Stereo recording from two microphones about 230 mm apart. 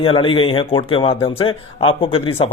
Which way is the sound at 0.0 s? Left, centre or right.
Left.